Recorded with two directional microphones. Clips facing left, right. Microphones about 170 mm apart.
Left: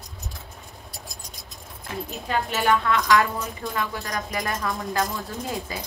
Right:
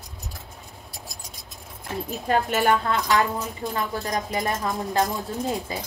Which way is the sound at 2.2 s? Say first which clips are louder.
Right 2 dB; 40° right (ahead or behind).